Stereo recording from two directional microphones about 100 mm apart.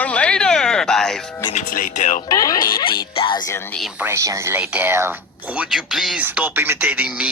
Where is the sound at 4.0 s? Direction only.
25° right (ahead or behind).